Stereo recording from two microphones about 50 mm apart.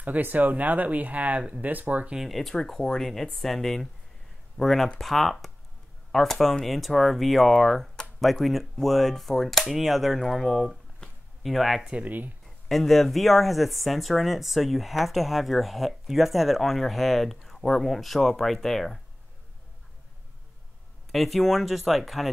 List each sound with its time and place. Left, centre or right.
0.0 s speech: right
2.1 s speech: centre
11.8 s speech: right
12.6 s speech: centre
21.1 s speech: centre